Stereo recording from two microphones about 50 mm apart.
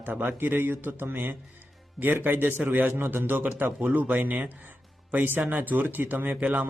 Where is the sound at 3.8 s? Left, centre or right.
Right.